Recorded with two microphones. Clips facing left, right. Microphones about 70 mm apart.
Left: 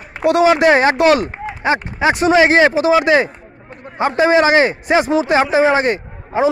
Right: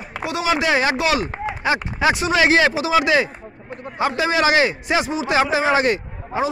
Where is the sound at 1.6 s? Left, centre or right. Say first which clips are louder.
Left 4 dB; left.